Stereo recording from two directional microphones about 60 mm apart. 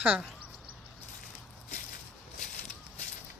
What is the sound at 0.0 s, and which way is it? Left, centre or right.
Speech, right.